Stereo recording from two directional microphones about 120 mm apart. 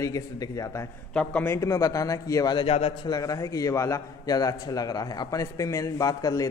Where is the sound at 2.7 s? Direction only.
55° left (ahead or behind).